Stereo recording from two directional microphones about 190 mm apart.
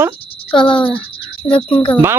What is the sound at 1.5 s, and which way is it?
Speech, 25° left (ahead or behind).